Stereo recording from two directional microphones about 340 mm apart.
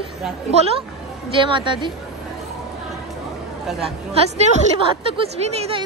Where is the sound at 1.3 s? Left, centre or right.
Centre.